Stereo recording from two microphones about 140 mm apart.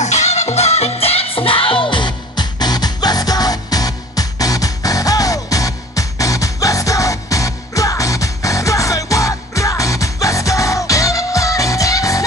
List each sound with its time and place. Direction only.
0.0 s music: 55° left (ahead or behind); by 12.3 s 25° left (ahead or behind)